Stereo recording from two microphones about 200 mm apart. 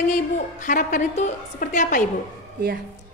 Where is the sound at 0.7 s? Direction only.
40° left (ahead or behind).